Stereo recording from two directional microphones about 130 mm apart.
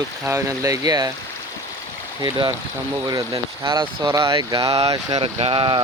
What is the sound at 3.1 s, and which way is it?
Speech, 25° right (ahead or behind).